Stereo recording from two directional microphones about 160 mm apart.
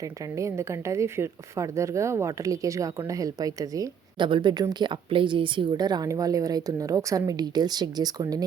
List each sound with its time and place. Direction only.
0.0 s speech: 20° right (ahead or behind)